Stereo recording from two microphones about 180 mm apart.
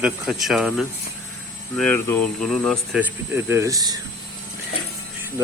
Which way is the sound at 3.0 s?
15° right (ahead or behind).